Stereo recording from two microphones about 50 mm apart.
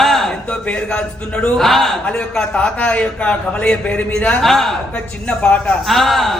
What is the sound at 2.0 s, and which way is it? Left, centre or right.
Speech, centre.